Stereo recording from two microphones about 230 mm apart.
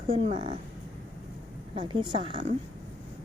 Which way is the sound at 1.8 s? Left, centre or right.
Right.